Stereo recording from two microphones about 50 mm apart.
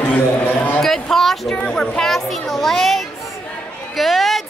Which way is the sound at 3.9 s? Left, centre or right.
Centre.